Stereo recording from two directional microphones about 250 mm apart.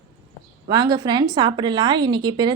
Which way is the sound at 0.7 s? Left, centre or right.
Centre.